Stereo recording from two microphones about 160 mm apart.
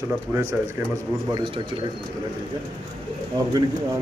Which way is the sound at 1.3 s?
35° right (ahead or behind).